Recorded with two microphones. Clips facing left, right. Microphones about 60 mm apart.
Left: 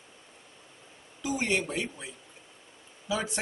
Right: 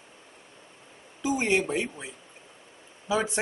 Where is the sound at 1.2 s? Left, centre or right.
Centre.